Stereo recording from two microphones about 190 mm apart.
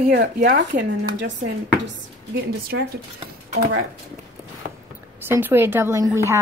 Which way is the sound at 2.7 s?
60° right (ahead or behind).